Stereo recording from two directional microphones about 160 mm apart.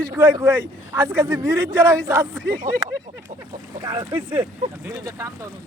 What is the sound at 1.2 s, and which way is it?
A man's voice, 25° right (ahead or behind).